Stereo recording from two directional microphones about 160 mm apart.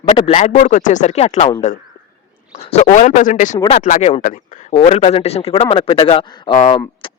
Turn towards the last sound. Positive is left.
turn(degrees=30)  # may be behind; listen again after turning